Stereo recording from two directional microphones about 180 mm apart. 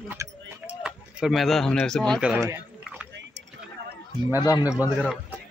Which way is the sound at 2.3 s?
10° right (ahead or behind).